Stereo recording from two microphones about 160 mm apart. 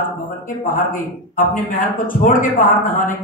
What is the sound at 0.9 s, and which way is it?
A man's voice, 60° left (ahead or behind).